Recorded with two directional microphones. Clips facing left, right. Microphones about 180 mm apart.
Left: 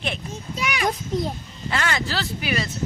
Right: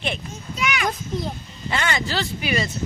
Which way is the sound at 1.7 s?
Centre (ahead or behind).